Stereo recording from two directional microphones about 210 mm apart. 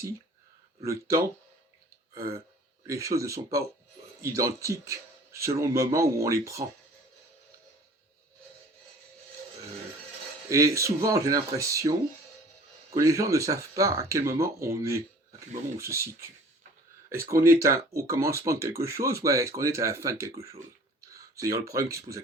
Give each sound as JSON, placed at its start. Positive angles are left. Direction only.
{"t": 0.9, "sound": "speech", "side_deg": -15}
{"t": 2.8, "sound": "speech", "side_deg": -15}
{"t": 10.5, "sound": "speech", "side_deg": -15}
{"t": 21.0, "sound": "a sound", "side_deg": -15}
{"t": 21.4, "sound": "speech", "side_deg": -15}